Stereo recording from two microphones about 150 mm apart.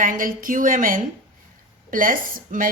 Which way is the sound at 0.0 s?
65° right (ahead or behind).